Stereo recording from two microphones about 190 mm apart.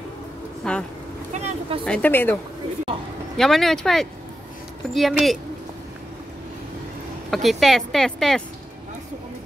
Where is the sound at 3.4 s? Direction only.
Centre (ahead or behind).